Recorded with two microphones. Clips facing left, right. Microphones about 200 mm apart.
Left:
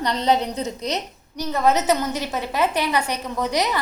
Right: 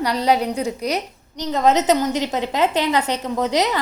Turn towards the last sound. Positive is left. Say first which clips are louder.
# right 3 dB
turn(degrees=-20)  # may be behind; listen again after turning